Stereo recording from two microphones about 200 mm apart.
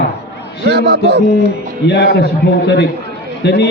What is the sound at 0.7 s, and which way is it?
Speech, 55° right (ahead or behind).